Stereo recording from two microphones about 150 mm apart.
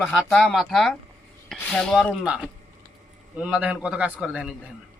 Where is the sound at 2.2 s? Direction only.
5° right (ahead or behind).